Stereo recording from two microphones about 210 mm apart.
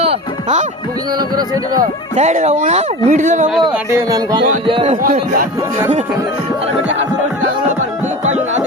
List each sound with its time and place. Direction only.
0.0 s music: 30° right (ahead or behind)
1.8 s speech: 35° right (ahead or behind)
4.6 s a man's voice: 25° right (ahead or behind)
5.0 s speech: 40° right (ahead or behind)
8.2 s music: 35° right (ahead or behind)